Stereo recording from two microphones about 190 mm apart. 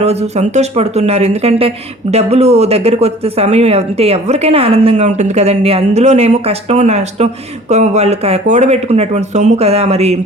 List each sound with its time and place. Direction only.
0.0 s speech: 35° right (ahead or behind)